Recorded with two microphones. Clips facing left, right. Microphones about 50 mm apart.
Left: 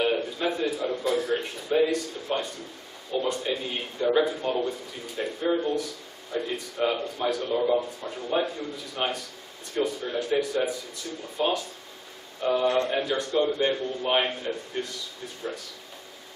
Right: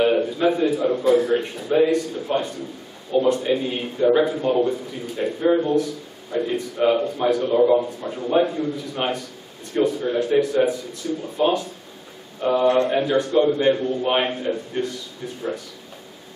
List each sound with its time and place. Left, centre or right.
0.0 s a sound: centre
0.7 s a man's voice: centre
12.4 s a man's voice: centre